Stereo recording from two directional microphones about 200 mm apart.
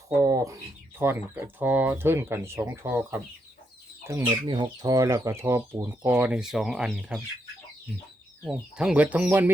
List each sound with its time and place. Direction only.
0.2 s bird: 15° right (ahead or behind)
1.0 s speech: 15° right (ahead or behind)
8.4 s speech: 5° right (ahead or behind)